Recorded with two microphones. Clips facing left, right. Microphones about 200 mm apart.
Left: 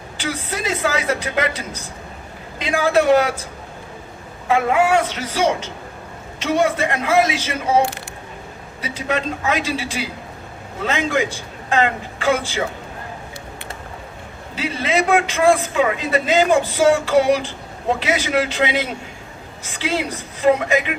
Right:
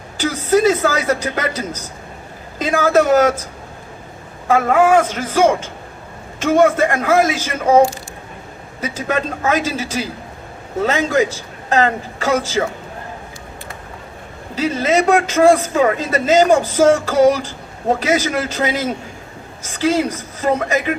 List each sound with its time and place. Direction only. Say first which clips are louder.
0.2 s speech: right 11 dB; 45° right (ahead or behind)
4.4 s speech: right 3 dB; 45° right (ahead or behind)
8.8 s a man's voice: right 2 dB; 45° right (ahead or behind)
14.5 s a man's voice: right 5 dB; 40° right (ahead or behind)